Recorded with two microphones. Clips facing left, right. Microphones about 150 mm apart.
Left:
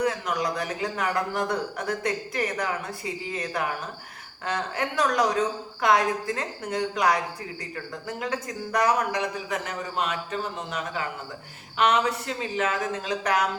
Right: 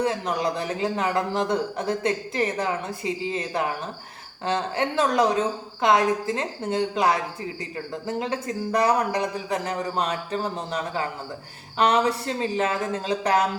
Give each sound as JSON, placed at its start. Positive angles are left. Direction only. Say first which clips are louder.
{"t": 0.0, "sound": "a man's voice", "louder": "right 2 dB", "side_deg": -30}